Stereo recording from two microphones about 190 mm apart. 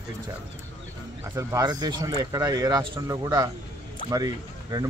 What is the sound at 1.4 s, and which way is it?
Speech, 20° right (ahead or behind).